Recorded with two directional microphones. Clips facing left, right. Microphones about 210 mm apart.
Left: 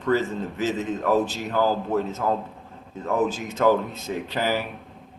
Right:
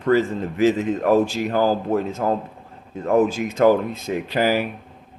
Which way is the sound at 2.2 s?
45° right (ahead or behind).